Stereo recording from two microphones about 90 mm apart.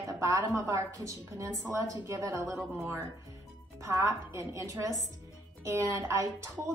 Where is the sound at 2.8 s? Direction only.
25° right (ahead or behind).